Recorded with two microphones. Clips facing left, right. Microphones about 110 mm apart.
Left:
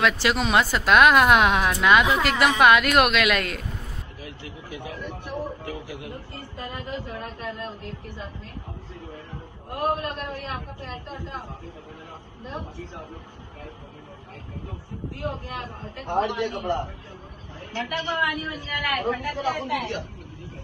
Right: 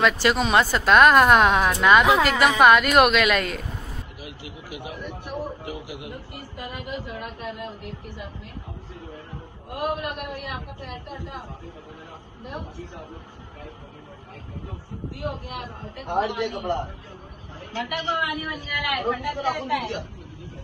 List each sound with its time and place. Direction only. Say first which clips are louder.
0.0 s a woman's voice: right 2 dB; centre (ahead or behind)
4.7 s a sound: even; 15° right (ahead or behind)
9.9 s a man's voice: even; 20° right (ahead or behind)
12.4 s a man's voice: even; 20° right (ahead or behind)
15.4 s a man's voice: even; 20° right (ahead or behind)